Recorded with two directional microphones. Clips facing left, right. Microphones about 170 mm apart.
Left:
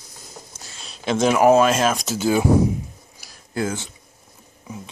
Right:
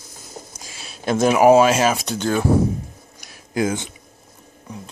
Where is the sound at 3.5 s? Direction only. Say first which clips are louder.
Right 4 dB; 20° right (ahead or behind).